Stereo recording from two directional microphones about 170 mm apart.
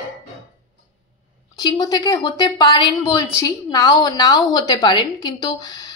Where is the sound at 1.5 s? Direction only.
25° left (ahead or behind).